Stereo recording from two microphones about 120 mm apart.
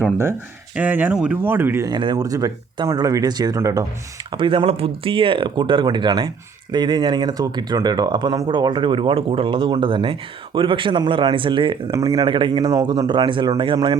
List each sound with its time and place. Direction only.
0.8 s speech: 15° right (ahead or behind)
1.9 s speech: 40° right (ahead or behind)
4.3 s speech: 45° right (ahead or behind)